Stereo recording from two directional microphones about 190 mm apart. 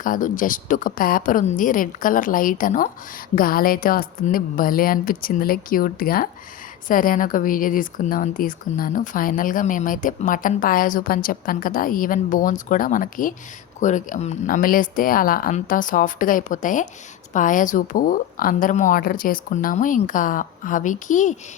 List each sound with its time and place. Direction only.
0.0 s a woman's voice: 45° left (ahead or behind)